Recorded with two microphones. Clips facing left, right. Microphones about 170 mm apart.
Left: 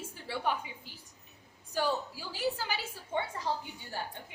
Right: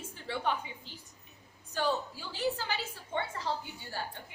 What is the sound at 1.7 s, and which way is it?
A woman's voice, 10° left (ahead or behind).